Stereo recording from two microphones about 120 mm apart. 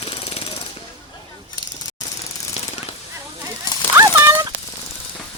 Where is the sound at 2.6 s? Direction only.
65° left (ahead or behind).